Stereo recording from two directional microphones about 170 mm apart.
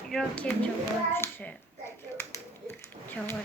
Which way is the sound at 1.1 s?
10° left (ahead or behind).